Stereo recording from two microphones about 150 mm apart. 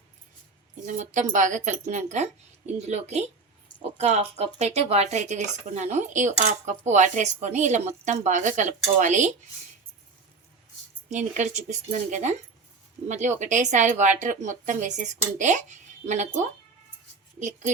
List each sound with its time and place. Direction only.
0.9 s speech: 55° right (ahead or behind)
11.1 s speech: 55° right (ahead or behind)